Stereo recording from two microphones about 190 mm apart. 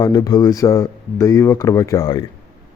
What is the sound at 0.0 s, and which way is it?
Speech, 20° left (ahead or behind).